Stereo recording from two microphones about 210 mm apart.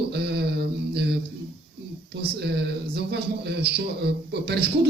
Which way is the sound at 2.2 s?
50° right (ahead or behind).